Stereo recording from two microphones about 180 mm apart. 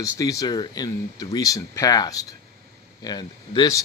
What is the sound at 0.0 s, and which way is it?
Speech, 20° left (ahead or behind).